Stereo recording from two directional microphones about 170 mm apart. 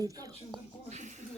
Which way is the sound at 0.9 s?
45° right (ahead or behind).